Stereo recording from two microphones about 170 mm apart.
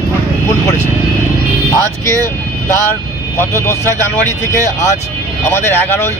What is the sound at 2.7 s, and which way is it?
Speech, 15° left (ahead or behind).